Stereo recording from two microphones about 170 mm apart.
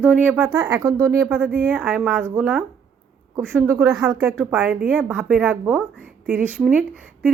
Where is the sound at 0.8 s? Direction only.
20° right (ahead or behind).